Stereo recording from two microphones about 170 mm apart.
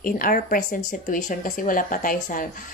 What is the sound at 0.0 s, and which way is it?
Speech, 55° left (ahead or behind).